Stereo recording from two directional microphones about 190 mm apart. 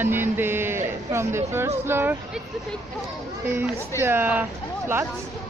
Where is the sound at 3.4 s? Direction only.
10° right (ahead or behind).